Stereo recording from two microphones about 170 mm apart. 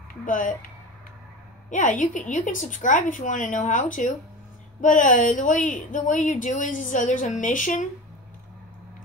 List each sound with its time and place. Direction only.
0.1 s a woman's voice: 50° left (ahead or behind)
1.7 s a woman's voice: 45° left (ahead or behind)